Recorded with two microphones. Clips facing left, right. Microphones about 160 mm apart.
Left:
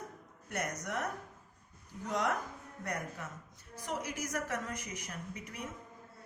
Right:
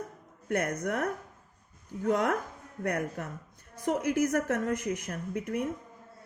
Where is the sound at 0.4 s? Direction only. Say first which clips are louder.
Right 9 dB; 55° right (ahead or behind).